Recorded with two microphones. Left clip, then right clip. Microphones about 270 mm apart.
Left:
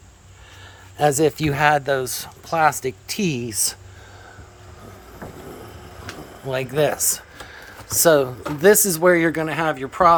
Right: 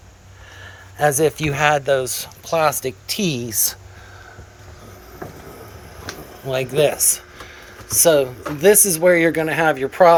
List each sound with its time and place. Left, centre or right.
0.6 s speech: left
6.5 s speech: centre